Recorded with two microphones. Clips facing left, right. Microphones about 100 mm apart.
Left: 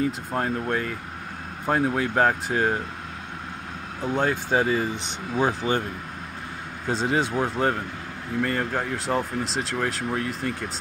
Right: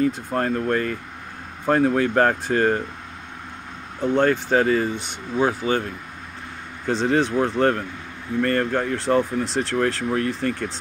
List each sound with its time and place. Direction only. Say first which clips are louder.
0.0 s speech: right 4 dB; 5° left (ahead or behind)
4.0 s speech: right 5 dB; 5° left (ahead or behind)
5.6 s speech: right 2 dB; 30° left (ahead or behind)
6.9 s speech: right 4 dB; 10° left (ahead or behind)